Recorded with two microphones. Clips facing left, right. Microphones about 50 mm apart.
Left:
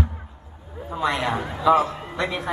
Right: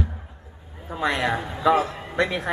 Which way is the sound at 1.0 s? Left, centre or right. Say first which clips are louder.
Even; right.